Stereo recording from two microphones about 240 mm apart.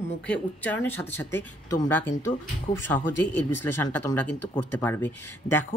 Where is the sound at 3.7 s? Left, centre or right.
Centre.